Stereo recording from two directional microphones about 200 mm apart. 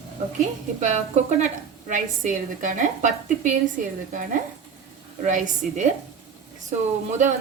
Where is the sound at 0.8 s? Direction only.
35° right (ahead or behind).